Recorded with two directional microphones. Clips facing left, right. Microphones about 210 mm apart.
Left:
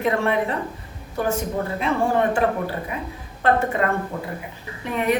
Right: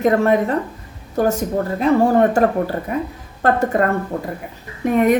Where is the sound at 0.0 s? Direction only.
45° right (ahead or behind).